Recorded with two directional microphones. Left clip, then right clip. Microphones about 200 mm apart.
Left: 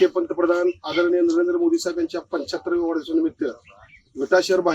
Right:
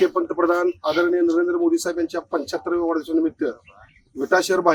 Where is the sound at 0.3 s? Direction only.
10° right (ahead or behind).